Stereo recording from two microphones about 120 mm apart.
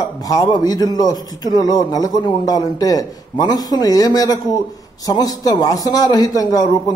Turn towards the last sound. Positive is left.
turn(degrees=30)  # may be behind; listen again after turning